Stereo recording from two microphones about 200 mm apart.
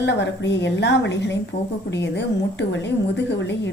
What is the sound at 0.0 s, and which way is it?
A woman's voice, 60° left (ahead or behind).